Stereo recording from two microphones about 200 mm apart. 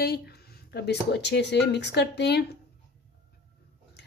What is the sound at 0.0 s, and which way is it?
A woman's voice, 50° left (ahead or behind).